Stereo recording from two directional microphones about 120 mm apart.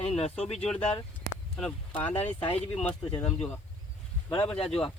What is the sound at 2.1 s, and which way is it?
Speech, 70° left (ahead or behind).